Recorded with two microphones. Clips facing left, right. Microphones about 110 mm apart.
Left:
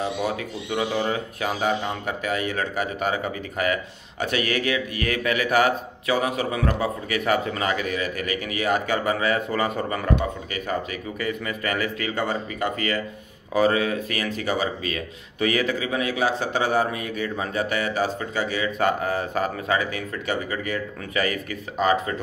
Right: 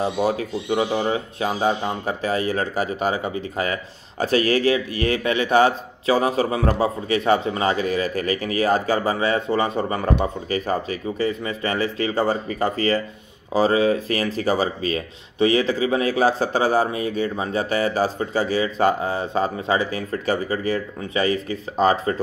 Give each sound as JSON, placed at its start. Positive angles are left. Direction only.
{"t": 0.0, "sound": "speech", "side_deg": -35}